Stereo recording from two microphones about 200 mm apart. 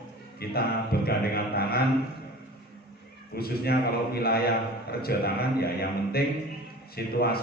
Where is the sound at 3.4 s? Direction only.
50° left (ahead or behind).